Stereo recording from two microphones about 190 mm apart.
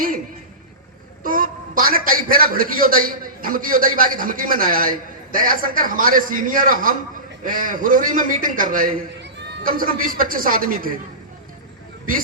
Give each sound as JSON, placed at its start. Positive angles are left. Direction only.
{"t": 1.2, "sound": "a man's voice", "side_deg": -45}